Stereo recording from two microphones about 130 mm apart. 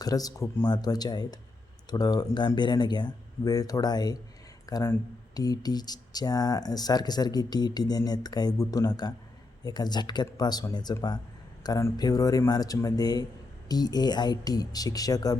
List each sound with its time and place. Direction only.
0.0 s speech: 30° left (ahead or behind)